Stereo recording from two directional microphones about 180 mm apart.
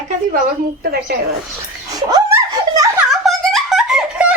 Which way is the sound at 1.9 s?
20° right (ahead or behind).